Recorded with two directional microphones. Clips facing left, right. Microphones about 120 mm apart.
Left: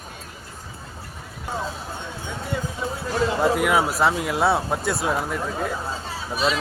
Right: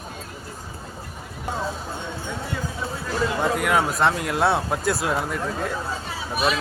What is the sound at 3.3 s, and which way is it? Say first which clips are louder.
Speech: left 2 dB; 5° left (ahead or behind).